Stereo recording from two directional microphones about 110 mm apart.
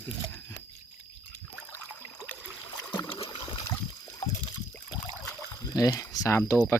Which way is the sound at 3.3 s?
50° left (ahead or behind).